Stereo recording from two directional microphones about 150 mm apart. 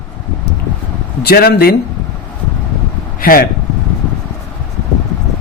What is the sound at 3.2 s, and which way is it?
Speech, 80° left.